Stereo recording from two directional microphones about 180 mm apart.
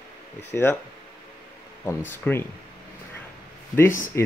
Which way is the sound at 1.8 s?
10° left (ahead or behind).